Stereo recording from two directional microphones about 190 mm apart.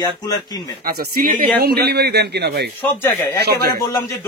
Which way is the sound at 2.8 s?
10° left (ahead or behind).